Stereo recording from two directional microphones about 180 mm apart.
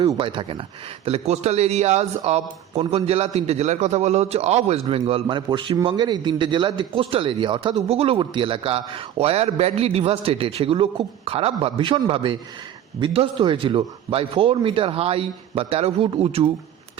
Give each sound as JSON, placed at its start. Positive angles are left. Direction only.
{"t": 0.1, "sound": "a man's voice", "side_deg": -25}